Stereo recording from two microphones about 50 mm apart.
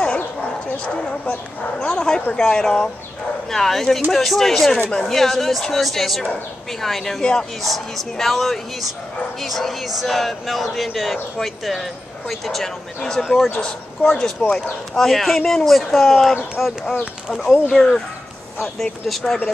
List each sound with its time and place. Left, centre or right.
0.8 s speech: left; by 7.2 s centre
7.2 s speech: centre
7.6 s speech: centre
14.4 s speech: centre
15.0 s speech: centre
17.6 s speech: centre